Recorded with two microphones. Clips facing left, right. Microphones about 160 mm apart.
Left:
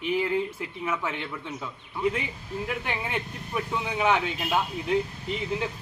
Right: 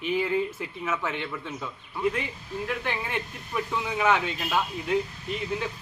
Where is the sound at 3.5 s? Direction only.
15° left (ahead or behind).